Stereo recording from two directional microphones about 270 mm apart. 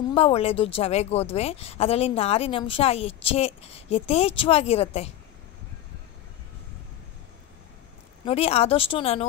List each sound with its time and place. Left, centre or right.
0.1 s speech: left
8.3 s speech: left